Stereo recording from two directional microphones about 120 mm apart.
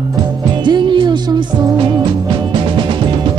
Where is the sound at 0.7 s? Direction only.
40° right (ahead or behind).